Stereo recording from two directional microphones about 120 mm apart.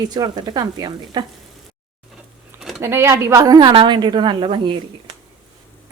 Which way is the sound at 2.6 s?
5° right (ahead or behind).